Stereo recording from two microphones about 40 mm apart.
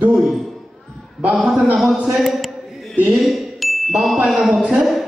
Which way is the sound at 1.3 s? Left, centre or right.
Centre.